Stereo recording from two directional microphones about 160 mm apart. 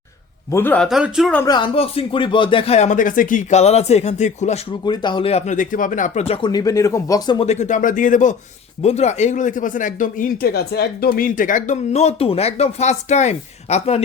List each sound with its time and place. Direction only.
0.5 s a man's voice: 10° left (ahead or behind)
0.9 s speech: 5° right (ahead or behind)
1.5 s speech: 30° left (ahead or behind); by 4.6 s 45° left (ahead or behind)
4.9 s speech: 30° left (ahead or behind)
5.5 s speech: 55° left (ahead or behind); by 6.5 s 40° left (ahead or behind)
6.5 s speech: 20° left (ahead or behind)
7.3 s speech: 45° left (ahead or behind)